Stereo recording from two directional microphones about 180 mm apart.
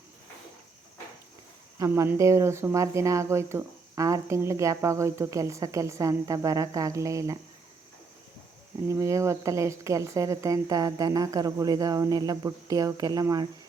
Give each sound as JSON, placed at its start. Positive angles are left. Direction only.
{"t": 1.8, "sound": "speech", "side_deg": -15}
{"t": 8.9, "sound": "speech", "side_deg": -15}